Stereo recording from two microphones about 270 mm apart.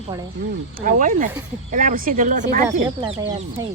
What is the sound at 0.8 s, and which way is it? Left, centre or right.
Speech, right.